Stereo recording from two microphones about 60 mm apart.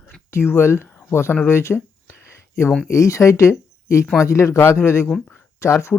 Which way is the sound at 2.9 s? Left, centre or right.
Left.